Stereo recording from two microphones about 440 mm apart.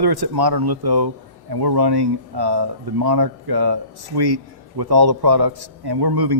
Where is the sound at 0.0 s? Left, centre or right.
Right.